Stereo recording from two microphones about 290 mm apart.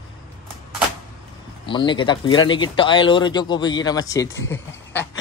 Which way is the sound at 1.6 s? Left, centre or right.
Centre.